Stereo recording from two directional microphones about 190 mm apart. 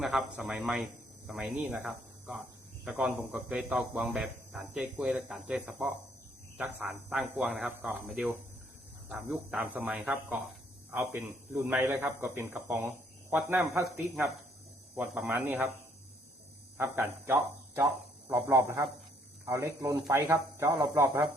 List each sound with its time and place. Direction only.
0.0 s speech: 5° right (ahead or behind)
9.6 s speech: 5° right (ahead or behind)
14.9 s speech: 10° right (ahead or behind)
16.7 s speech: 10° right (ahead or behind)